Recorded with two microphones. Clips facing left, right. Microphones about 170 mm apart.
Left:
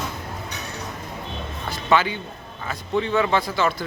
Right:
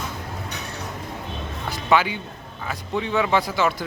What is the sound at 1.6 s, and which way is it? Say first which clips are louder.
Music: even; 10° right (ahead or behind).